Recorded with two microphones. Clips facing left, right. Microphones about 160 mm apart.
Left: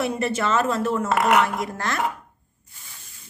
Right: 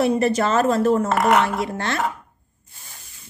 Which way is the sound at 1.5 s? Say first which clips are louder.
Right 3 dB; 30° right (ahead or behind).